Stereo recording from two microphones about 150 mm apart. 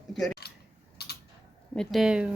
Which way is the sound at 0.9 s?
90° left.